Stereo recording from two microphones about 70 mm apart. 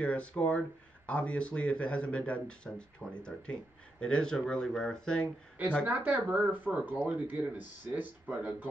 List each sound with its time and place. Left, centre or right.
0.0 s speech: centre
5.9 s speech: right